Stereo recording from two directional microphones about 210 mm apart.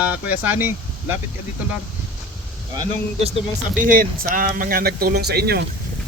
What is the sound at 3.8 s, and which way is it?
Speech, 40° right (ahead or behind).